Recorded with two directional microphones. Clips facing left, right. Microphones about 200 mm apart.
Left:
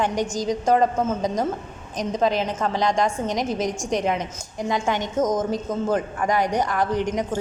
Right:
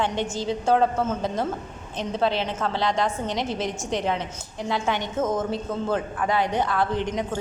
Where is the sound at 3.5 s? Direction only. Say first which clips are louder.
Left 3 dB; 45° left (ahead or behind).